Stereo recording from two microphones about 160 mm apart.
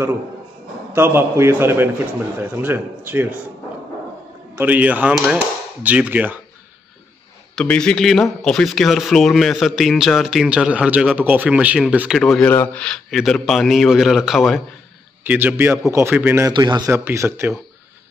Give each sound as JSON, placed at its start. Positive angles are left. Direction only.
{"t": 0.9, "sound": "speech", "side_deg": -15}
{"t": 4.6, "sound": "speech", "side_deg": -10}
{"t": 7.5, "sound": "speech", "side_deg": 5}
{"t": 15.2, "sound": "speech", "side_deg": -15}
{"t": 16.5, "sound": "a man's voice", "side_deg": -25}
{"t": 16.9, "sound": "speech", "side_deg": -15}